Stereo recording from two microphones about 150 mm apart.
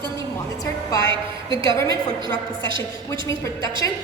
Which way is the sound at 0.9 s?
25° left (ahead or behind).